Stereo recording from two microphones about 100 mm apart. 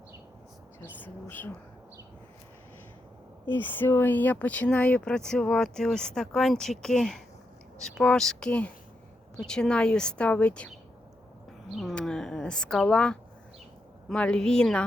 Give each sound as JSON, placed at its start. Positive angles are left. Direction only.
{"t": 0.8, "sound": "speech", "side_deg": 20}
{"t": 3.5, "sound": "speech", "side_deg": 20}
{"t": 11.7, "sound": "speech", "side_deg": 0}